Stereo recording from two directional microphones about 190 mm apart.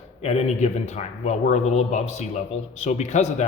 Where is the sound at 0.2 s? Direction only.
35° left (ahead or behind).